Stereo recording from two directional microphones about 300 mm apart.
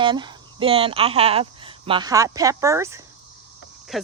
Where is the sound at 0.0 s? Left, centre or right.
Centre.